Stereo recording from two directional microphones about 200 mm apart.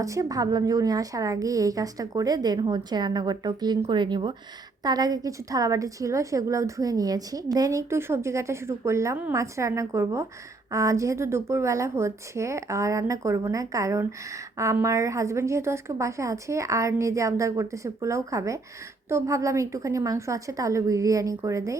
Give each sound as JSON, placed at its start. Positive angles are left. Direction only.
{"t": 0.0, "sound": "a woman's voice", "side_deg": -15}